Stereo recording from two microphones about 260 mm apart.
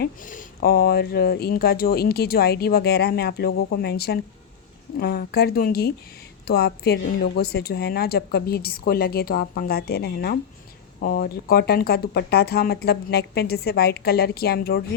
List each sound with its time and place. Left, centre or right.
0.0 s speech: left